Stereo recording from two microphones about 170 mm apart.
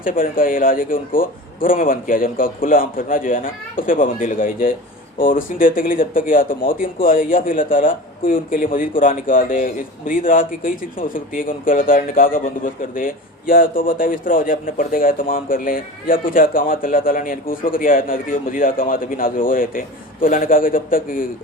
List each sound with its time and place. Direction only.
0.0 s speech: 55° left (ahead or behind)